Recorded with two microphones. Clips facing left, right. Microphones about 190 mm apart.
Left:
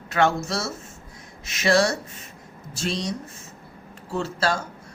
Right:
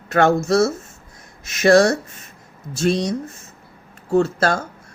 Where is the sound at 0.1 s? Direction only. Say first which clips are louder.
Right 7 dB; 45° right (ahead or behind).